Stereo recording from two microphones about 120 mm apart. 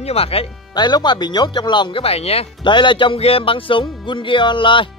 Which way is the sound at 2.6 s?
40° left (ahead or behind).